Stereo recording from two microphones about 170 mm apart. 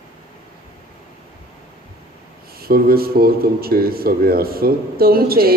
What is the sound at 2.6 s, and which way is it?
Speech, 60° right (ahead or behind).